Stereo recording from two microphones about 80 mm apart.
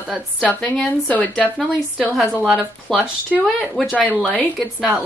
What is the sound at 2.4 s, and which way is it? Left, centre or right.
Speech, centre.